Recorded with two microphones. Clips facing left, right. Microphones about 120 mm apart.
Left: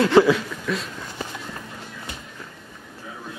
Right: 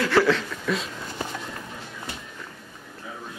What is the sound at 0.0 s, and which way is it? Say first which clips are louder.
Speech: left 5 dB; 20° left (ahead or behind).